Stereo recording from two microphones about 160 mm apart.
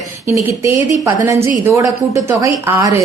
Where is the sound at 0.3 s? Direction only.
15° right (ahead or behind).